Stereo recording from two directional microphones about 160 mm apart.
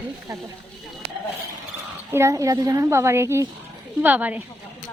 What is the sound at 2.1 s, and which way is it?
A child's voice, 20° right (ahead or behind).